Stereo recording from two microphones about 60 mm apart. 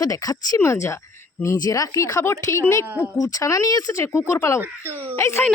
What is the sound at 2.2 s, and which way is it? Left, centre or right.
Speech, left.